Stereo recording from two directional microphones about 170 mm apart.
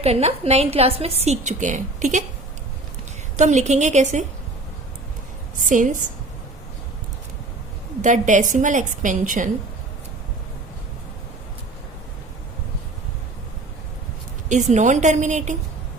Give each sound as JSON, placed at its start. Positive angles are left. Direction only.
{"t": 0.0, "sound": "a woman's voice", "side_deg": -35}
{"t": 3.3, "sound": "a woman's voice", "side_deg": -45}
{"t": 5.5, "sound": "a woman's voice", "side_deg": -50}
{"t": 8.0, "sound": "a woman's voice", "side_deg": -45}
{"t": 14.5, "sound": "a woman's voice", "side_deg": -45}